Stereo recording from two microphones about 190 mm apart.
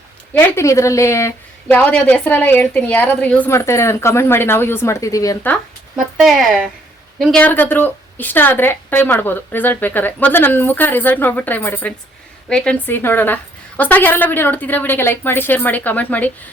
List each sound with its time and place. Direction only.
0.3 s a woman's voice: 15° left (ahead or behind)
6.1 s a woman's voice: centre (ahead or behind)